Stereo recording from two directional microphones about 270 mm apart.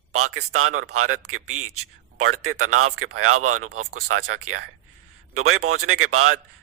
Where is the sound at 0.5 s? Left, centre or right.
Right.